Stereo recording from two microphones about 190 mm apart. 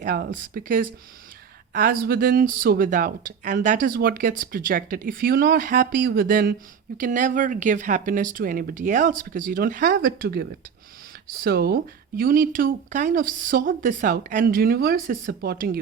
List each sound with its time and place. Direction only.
0.0 s speech: 60° right (ahead or behind)
0.3 s speech: 45° right (ahead or behind)